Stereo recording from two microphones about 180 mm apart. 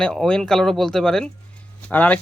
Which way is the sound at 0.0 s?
5° left (ahead or behind).